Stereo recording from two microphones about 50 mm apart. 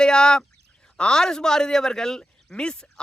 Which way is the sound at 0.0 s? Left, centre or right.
Centre.